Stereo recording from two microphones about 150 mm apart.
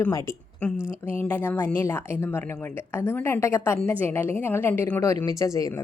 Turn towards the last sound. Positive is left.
turn(degrees=20)  # may be behind; listen again after turning